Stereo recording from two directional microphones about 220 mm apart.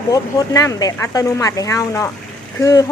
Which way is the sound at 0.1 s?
15° left (ahead or behind).